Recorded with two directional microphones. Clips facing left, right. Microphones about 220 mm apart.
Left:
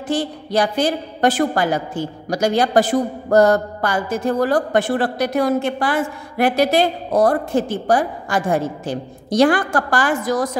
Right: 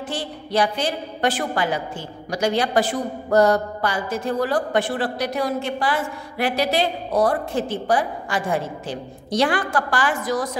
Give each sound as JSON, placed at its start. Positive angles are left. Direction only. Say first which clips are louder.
{"t": 0.1, "sound": "a woman's voice", "louder": "left 6 dB", "side_deg": 45}